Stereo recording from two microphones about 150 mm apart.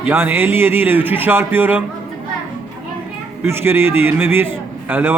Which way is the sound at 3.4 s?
15° right (ahead or behind).